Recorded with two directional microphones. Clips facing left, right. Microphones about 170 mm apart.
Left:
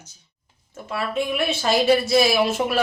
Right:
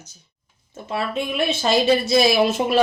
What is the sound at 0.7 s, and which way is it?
Speech, 20° right (ahead or behind).